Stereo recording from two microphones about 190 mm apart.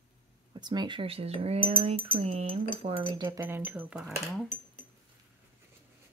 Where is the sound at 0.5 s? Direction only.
20° right (ahead or behind).